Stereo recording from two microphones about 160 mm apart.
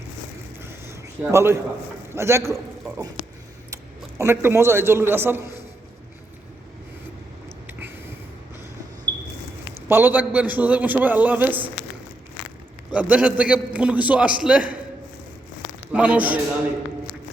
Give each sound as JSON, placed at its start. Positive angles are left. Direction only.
{"t": 0.6, "sound": "a sound", "side_deg": -15}
{"t": 2.1, "sound": "a man's voice", "side_deg": -15}
{"t": 4.2, "sound": "a man's voice", "side_deg": -15}
{"t": 7.7, "sound": "a sound", "side_deg": -10}
{"t": 9.9, "sound": "a man's voice", "side_deg": -10}
{"t": 12.9, "sound": "a man's voice", "side_deg": -10}
{"t": 15.9, "sound": "a man's voice", "side_deg": -10}